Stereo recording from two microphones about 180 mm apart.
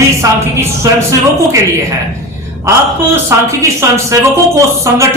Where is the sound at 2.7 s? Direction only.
15° right (ahead or behind).